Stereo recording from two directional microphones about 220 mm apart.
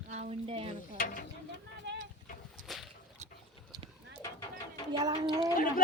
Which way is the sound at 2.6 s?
35° right (ahead or behind).